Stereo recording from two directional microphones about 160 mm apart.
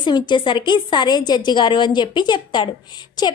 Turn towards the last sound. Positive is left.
turn(degrees=25)  # may be behind; listen again after turning